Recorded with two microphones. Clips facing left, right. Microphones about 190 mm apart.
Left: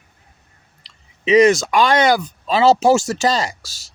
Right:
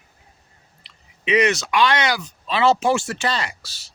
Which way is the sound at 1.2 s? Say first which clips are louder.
Left 7 dB; 40° left (ahead or behind).